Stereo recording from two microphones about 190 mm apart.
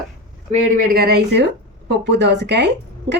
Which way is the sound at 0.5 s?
50° right (ahead or behind).